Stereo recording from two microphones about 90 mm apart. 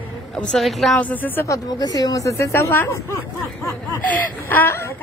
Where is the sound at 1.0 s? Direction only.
20° left (ahead or behind).